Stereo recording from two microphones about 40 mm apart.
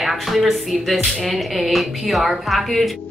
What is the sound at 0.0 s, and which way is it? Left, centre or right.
A woman's voice, centre.